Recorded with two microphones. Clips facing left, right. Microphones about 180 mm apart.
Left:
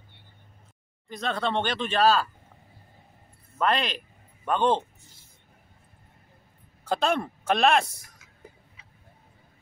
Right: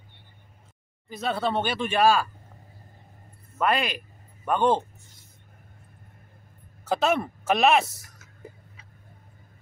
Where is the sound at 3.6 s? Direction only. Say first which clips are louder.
Right 1 dB; 10° right (ahead or behind).